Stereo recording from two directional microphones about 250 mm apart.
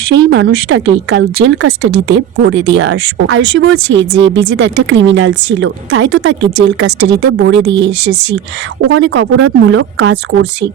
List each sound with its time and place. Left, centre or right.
0.0 s speech: right
7.0 s speech: right
8.9 s speech: right